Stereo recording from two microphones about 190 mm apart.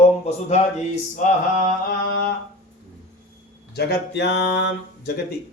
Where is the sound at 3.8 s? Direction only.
60° left (ahead or behind).